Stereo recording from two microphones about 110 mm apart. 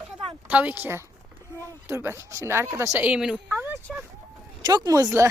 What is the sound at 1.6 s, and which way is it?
A woman's voice, 25° right (ahead or behind).